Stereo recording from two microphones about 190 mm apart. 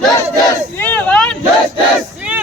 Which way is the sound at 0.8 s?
10° left (ahead or behind).